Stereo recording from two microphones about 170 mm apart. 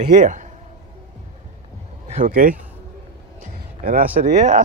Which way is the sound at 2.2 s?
55° right (ahead or behind).